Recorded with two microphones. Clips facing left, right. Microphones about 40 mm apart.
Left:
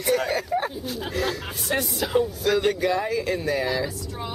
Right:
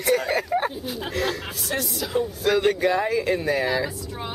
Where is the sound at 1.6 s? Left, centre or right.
Left.